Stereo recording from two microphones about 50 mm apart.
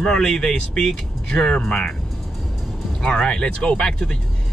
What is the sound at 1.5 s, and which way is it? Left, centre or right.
Speech, left.